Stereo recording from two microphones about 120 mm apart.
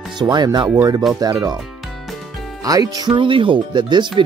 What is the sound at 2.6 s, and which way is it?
Speech, 30° right (ahead or behind).